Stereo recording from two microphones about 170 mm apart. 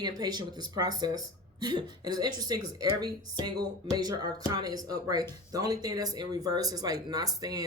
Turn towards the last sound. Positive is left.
turn(degrees=-20)  # may be behind; listen again after turning